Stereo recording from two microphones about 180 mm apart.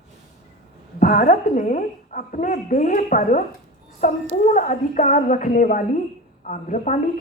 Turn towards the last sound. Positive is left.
turn(degrees=45)  # may be behind; listen again after turning